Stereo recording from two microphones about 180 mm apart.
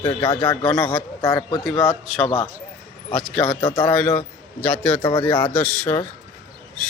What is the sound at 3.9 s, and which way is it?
A man's voice, 5° left (ahead or behind).